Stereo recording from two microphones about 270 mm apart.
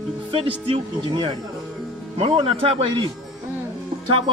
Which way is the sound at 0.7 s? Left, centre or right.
Centre.